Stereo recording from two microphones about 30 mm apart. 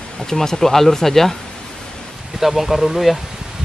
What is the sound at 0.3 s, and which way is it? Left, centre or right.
Speech, centre.